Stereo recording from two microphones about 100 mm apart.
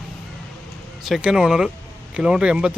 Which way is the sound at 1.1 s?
5° right (ahead or behind).